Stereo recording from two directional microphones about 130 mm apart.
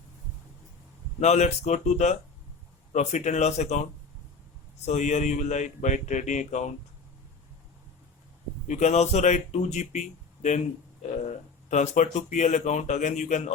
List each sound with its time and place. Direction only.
1.2 s speech: 60° left (ahead or behind)
4.9 s speech: 65° left (ahead or behind)
8.6 s speech: 65° left (ahead or behind)